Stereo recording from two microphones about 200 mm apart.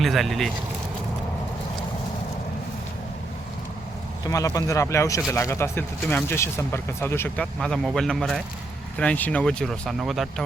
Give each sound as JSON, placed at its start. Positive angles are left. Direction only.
{"t": 0.0, "sound": "speech", "side_deg": 0}
{"t": 4.3, "sound": "speech", "side_deg": 15}